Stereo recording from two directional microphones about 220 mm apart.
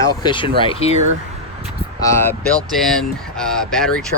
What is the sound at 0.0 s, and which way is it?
Speech, 20° left (ahead or behind).